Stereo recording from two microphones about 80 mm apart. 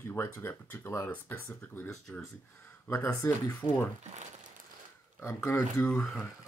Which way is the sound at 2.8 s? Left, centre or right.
Left.